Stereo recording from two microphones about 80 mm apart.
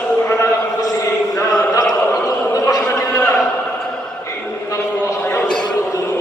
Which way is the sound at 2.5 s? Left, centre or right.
Left.